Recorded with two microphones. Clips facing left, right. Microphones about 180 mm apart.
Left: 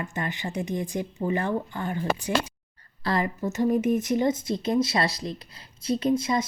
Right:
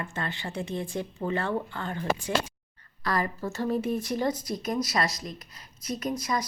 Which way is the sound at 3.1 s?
20° left (ahead or behind).